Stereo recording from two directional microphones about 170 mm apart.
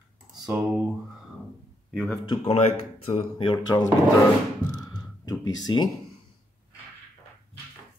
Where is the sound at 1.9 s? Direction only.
Centre (ahead or behind).